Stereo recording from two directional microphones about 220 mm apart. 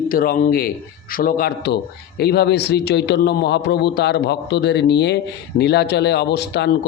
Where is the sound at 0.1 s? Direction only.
40° left (ahead or behind).